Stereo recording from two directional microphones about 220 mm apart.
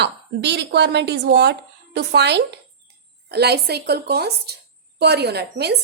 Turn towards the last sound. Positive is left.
turn(degrees=-50)  # may be behind; listen again after turning